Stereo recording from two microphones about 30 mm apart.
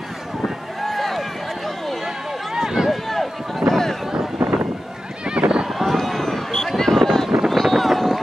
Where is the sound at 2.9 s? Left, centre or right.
Centre.